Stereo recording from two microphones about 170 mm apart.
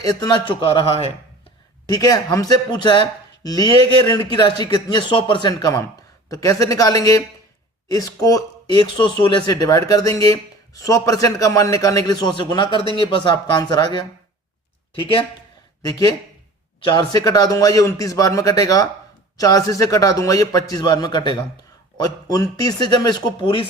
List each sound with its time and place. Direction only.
0.0 s a man's voice: 20° left (ahead or behind)
1.9 s speech: 20° left (ahead or behind)